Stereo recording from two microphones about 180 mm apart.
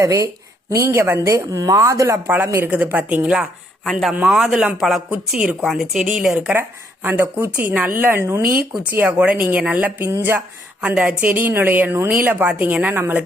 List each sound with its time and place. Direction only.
0.0 s speech: 20° right (ahead or behind)